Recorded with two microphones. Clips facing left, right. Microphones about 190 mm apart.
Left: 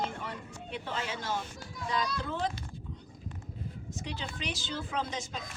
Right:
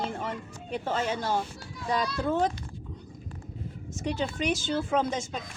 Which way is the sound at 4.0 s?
45° right (ahead or behind).